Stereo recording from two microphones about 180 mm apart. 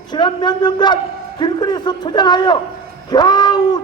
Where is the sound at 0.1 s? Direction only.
25° left (ahead or behind).